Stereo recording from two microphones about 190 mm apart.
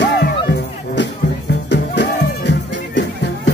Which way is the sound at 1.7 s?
65° left (ahead or behind).